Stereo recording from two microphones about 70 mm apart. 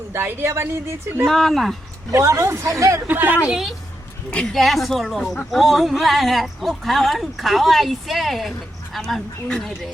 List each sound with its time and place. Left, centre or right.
0.1 s a woman's voice: right
1.2 s speech: centre
2.0 s speech: right
3.1 s a woman's voice: right
3.5 s speech: centre